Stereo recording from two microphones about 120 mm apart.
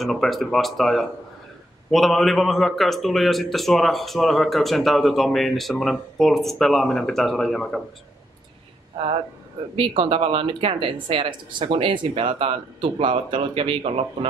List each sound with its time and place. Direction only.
0.0 s a man's voice: centre (ahead or behind)
9.8 s speech: 50° right (ahead or behind)